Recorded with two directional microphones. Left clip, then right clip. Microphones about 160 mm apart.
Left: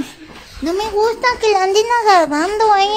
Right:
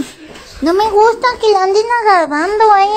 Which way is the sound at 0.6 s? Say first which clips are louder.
Right 7 dB; 20° right (ahead or behind).